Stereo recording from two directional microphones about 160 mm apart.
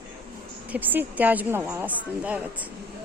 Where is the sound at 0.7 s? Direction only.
10° right (ahead or behind).